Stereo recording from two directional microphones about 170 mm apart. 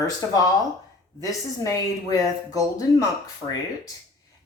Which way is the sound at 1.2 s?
20° left (ahead or behind).